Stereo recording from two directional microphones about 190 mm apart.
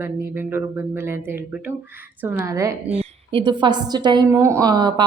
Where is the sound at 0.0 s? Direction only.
10° right (ahead or behind).